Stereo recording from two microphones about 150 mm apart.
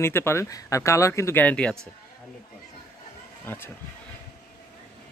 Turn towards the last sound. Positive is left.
turn(degrees=15)  # may be behind; listen again after turning